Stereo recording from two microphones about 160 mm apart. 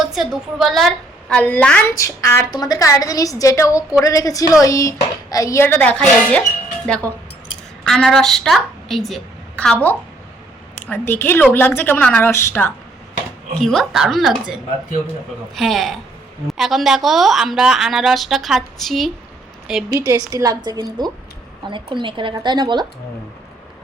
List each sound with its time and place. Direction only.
0.0 s a woman's voice: centre (ahead or behind)
7.9 s a woman's voice: centre (ahead or behind)
13.6 s a woman's voice: centre (ahead or behind)
20.0 s a woman's voice: 20° right (ahead or behind)